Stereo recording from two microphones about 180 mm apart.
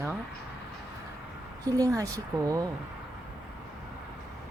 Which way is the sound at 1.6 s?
20° right (ahead or behind).